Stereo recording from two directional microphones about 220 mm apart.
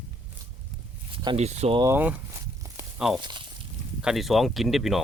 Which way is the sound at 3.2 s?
20° right (ahead or behind).